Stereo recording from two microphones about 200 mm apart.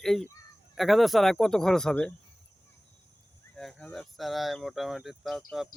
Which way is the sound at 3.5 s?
Centre (ahead or behind).